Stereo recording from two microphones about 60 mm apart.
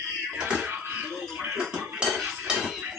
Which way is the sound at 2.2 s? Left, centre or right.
Centre.